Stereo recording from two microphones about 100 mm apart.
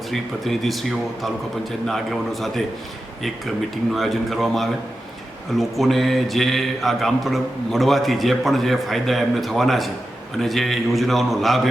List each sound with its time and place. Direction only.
0.1 s a man's voice: centre (ahead or behind)
3.9 s a man's voice: centre (ahead or behind)